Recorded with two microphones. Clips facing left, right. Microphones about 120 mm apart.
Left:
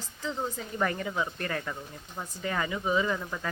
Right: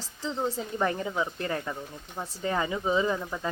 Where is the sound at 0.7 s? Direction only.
20° right (ahead or behind).